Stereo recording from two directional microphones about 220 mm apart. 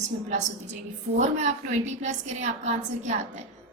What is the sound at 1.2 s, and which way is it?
A woman's voice, 30° right (ahead or behind).